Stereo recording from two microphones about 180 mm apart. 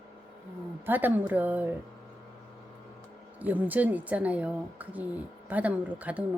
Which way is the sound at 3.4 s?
10° right (ahead or behind).